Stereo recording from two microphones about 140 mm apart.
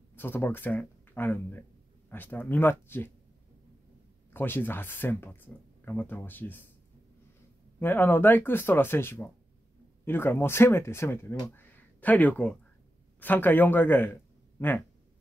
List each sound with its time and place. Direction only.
0.1 s speech: 15° left (ahead or behind)
4.3 s speech: 15° left (ahead or behind)
7.8 s speech: 15° left (ahead or behind)